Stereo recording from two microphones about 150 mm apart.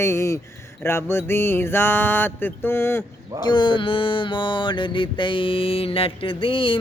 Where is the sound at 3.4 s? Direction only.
30° left (ahead or behind).